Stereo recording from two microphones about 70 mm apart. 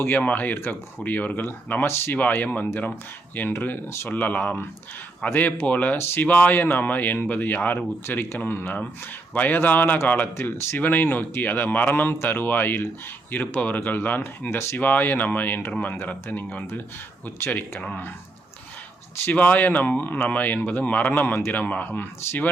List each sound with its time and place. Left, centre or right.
0.0 s speech: left
10.3 s speech: left
10.8 s speech: left
19.2 s speech: left